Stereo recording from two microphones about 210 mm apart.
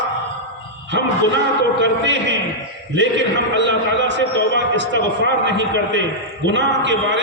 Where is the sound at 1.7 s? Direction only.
60° right (ahead or behind).